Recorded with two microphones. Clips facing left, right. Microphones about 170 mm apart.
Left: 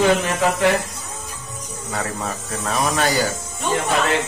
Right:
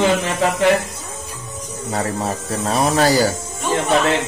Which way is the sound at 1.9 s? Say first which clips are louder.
Right 4 dB; 35° right (ahead or behind).